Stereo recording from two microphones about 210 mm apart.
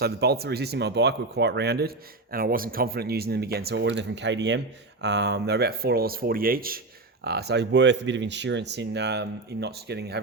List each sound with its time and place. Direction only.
0.0 s speech: 50° right (ahead or behind)